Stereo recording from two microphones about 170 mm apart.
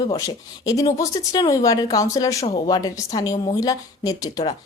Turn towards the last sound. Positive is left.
turn(degrees=20)  # may be behind; listen again after turning